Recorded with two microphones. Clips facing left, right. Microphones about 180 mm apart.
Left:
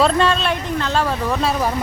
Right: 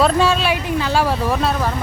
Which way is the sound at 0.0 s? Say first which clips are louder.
Right 1 dB; 5° right (ahead or behind).